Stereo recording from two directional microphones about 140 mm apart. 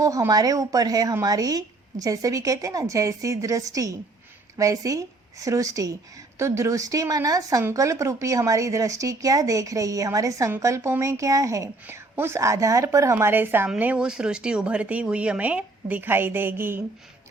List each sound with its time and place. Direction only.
0.0 s a woman's voice: 25° right (ahead or behind)